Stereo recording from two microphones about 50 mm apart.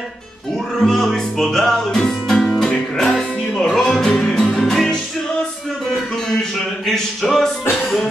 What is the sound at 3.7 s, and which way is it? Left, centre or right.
Music, centre.